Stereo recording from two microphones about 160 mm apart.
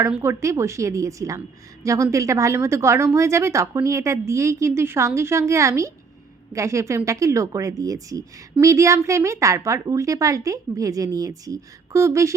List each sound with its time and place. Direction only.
0.0 s a woman's voice: 15° right (ahead or behind)